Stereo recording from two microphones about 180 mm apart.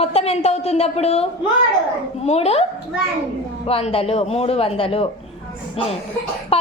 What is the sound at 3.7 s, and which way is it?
A woman's voice, 30° left (ahead or behind).